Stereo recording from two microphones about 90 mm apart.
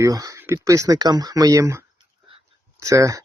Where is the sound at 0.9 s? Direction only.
50° right (ahead or behind).